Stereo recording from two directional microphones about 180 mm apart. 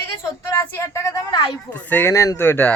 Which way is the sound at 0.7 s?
15° left (ahead or behind).